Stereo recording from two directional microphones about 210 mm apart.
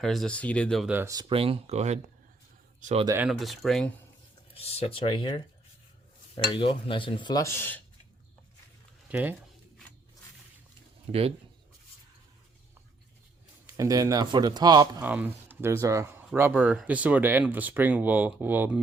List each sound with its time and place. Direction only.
0.0 s speech: centre (ahead or behind); by 3.1 s 30° right (ahead or behind)
3.1 s speech: 5° right (ahead or behind)
4.5 s speech: 30° left (ahead or behind)
6.3 s speech: 25° left (ahead or behind)
9.0 s speech: 5° right (ahead or behind)
11.1 s speech: 30° right (ahead or behind)
13.7 s speech: 15° right (ahead or behind)
15.0 s speech: 10° right (ahead or behind)